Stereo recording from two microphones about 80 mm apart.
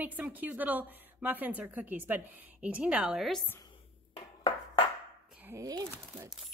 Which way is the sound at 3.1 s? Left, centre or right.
Centre.